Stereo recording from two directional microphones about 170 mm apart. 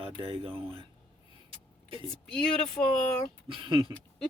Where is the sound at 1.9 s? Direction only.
30° right (ahead or behind).